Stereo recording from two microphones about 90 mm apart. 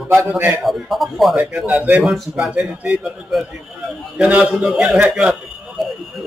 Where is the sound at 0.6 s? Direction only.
Centre (ahead or behind).